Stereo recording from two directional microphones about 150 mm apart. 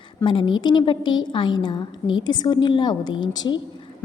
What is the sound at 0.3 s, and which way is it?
A woman's voice, 30° left (ahead or behind).